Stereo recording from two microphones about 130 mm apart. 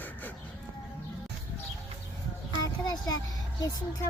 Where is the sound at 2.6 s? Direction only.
30° left (ahead or behind).